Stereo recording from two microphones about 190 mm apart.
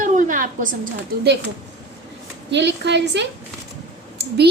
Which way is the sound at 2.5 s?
65° right (ahead or behind).